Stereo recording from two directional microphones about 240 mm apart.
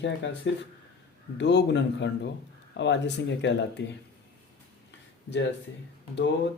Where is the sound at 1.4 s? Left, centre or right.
Left.